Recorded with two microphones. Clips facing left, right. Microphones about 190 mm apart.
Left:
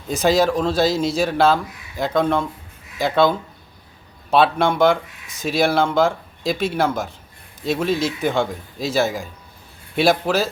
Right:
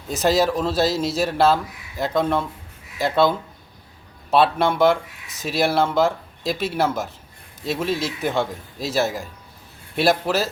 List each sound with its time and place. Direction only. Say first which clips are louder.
0.1 s speech: left 2 dB; centre (ahead or behind)